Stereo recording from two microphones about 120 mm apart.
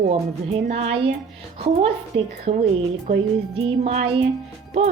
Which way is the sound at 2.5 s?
55° right (ahead or behind).